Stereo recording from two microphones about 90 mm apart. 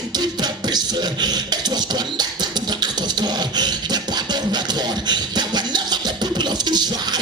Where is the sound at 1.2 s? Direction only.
50° right (ahead or behind).